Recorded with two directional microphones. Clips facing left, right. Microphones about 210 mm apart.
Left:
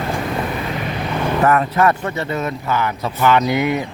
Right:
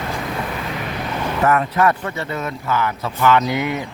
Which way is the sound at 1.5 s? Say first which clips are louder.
Even; 30° left (ahead or behind).